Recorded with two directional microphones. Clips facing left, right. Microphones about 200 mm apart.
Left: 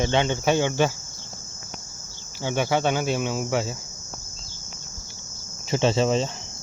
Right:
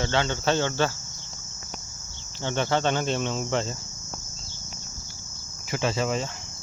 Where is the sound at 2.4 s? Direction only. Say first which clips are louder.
Left 2 dB; 10° left (ahead or behind).